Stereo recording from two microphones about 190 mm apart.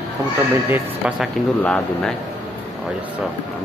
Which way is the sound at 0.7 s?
5° right (ahead or behind).